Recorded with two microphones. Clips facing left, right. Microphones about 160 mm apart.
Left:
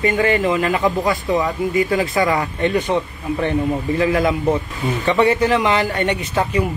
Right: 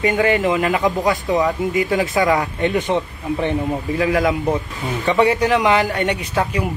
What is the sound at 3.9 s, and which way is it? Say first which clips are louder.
Speech: right 1 dB; 10° right (ahead or behind).